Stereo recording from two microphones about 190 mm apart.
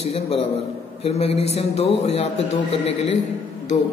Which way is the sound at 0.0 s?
30° left (ahead or behind).